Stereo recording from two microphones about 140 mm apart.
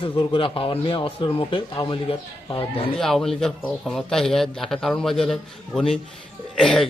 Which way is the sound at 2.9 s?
Centre (ahead or behind).